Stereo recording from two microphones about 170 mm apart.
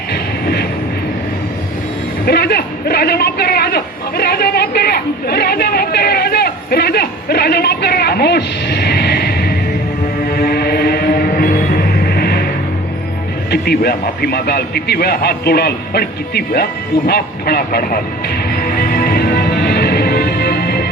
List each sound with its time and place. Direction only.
0.1 s vehicle: 70° left (ahead or behind)
2.2 s a sound: 70° left (ahead or behind)
10.2 s music: 65° left (ahead or behind)
13.5 s a man's voice: 65° left (ahead or behind)
18.4 s music: 60° left (ahead or behind)